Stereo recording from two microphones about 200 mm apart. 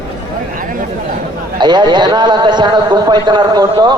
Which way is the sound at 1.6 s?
20° right (ahead or behind).